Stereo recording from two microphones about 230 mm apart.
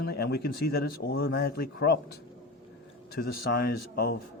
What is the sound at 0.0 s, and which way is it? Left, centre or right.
Speech, left.